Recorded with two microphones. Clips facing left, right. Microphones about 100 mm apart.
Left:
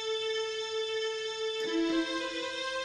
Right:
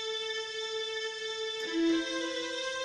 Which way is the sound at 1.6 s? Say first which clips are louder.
Right 2 dB; 45° left (ahead or behind).